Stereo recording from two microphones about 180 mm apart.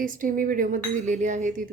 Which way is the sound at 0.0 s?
50° right (ahead or behind).